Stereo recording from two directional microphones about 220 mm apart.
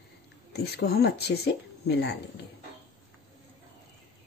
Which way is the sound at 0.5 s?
45° left (ahead or behind).